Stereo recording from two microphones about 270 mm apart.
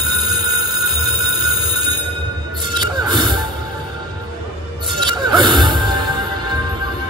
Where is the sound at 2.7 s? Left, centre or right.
Centre.